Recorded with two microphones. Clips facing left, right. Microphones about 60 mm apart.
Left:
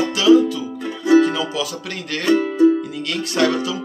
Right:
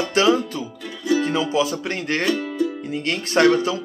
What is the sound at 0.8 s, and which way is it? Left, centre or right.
Music, left.